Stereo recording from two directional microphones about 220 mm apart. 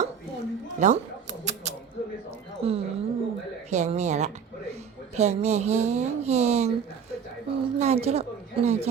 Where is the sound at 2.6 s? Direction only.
25° right (ahead or behind).